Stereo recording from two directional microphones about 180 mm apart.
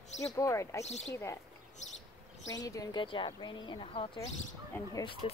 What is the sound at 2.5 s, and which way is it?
Speech, 20° left (ahead or behind).